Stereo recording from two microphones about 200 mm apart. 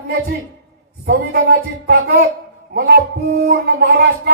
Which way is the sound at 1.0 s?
55° right (ahead or behind).